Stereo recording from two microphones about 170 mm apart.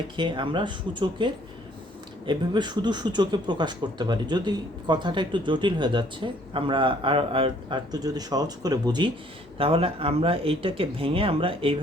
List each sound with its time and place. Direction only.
0.2 s speech: 30° right (ahead or behind)